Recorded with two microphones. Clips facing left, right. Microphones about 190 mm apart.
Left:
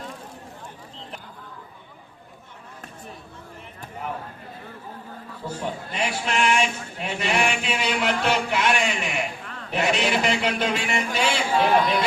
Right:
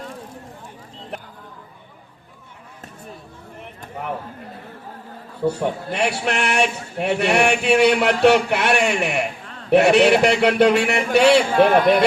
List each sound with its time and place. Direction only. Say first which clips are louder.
5.4 s a man's voice: right 9 dB; 70° right (ahead or behind)